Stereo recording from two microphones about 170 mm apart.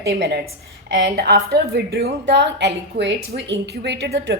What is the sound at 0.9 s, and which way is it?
A woman's voice, 90° right.